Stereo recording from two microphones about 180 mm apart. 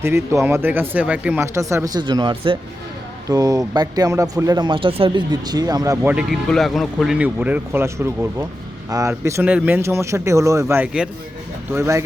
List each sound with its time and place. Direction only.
0.0 s speech: 15° right (ahead or behind)
6.0 s speech: 10° right (ahead or behind)